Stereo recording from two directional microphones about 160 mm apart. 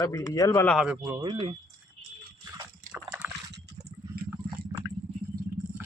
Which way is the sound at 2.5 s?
20° right (ahead or behind).